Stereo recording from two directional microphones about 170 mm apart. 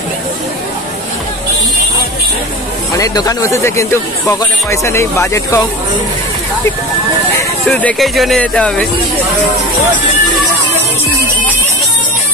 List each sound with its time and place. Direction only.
3.0 s speech: 20° left (ahead or behind)
7.6 s speech: 5° left (ahead or behind)